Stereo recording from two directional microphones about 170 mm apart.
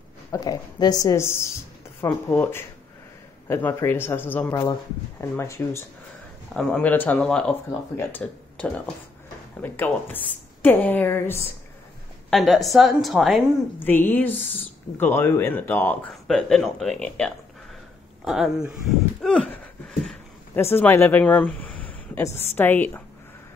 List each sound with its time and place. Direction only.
0.3 s speech: 25° left (ahead or behind)
6.5 s a woman's voice: 5° left (ahead or behind)
12.3 s a woman's voice: centre (ahead or behind)
13.8 s a woman's voice: 10° left (ahead or behind)
19.2 s a sound: 5° left (ahead or behind)
20.7 s speech: 15° left (ahead or behind)